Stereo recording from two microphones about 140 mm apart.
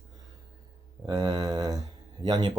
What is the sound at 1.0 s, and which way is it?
Speech, 30° right (ahead or behind).